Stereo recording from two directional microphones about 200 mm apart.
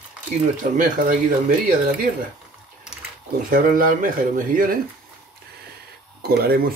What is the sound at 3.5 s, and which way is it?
Speech, 45° right (ahead or behind).